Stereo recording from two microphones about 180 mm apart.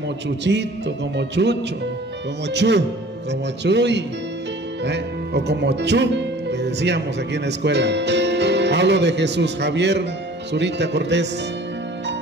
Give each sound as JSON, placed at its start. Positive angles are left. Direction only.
{"t": 0.4, "sound": "music", "side_deg": -75}
{"t": 4.8, "sound": "speech", "side_deg": -70}
{"t": 10.5, "sound": "music", "side_deg": -75}